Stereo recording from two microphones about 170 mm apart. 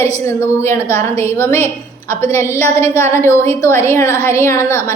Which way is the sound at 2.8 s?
15° left (ahead or behind).